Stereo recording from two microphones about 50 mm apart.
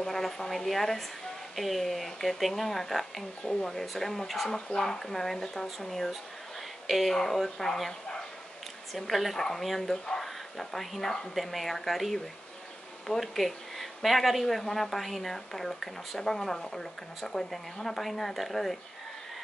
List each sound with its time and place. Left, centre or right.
0.0 s speech: centre